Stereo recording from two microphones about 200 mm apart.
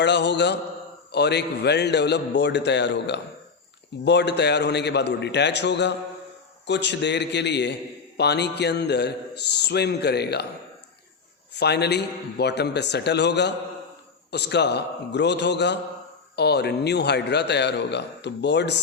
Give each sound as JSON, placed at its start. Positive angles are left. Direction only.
{"t": 0.0, "sound": "a man's voice", "side_deg": 60}
{"t": 11.5, "sound": "a man's voice", "side_deg": 55}